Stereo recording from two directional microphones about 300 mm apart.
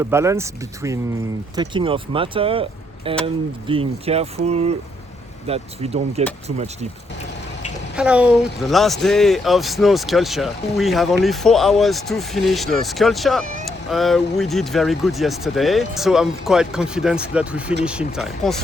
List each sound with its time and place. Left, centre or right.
0.0 s speech: centre
7.9 s speech: centre